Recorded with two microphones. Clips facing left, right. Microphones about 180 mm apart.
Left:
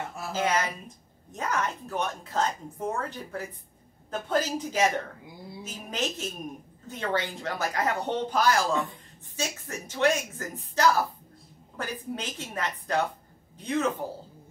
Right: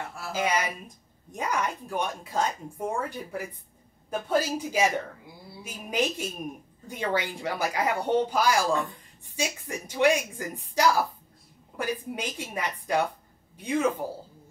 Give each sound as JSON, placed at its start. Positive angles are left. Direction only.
{"t": 0.3, "sound": "speech", "side_deg": -10}